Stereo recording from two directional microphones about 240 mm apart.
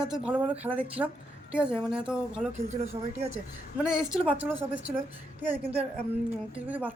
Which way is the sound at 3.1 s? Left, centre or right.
Right.